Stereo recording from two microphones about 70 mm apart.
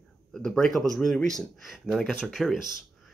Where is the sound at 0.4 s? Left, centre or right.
Centre.